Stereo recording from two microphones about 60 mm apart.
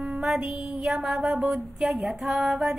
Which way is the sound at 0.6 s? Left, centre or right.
Centre.